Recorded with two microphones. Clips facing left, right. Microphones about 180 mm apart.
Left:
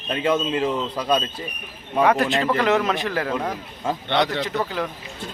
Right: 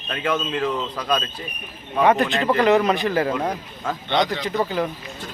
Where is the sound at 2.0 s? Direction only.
Centre (ahead or behind).